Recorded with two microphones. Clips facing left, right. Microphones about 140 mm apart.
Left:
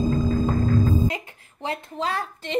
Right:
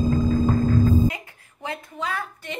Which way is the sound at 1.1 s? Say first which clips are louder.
Left 1 dB; 25° left (ahead or behind).